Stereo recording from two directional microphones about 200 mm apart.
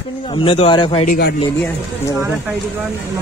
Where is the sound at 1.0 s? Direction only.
50° left (ahead or behind).